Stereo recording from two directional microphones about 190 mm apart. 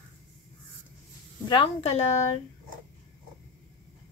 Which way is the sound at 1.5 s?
30° left (ahead or behind).